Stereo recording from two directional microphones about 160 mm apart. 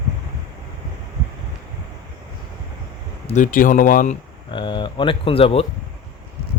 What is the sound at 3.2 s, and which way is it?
Speech, 50° left (ahead or behind).